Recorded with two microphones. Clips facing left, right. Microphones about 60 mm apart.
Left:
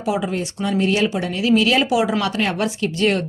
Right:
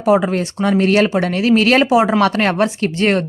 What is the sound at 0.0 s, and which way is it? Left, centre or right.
Speech, right.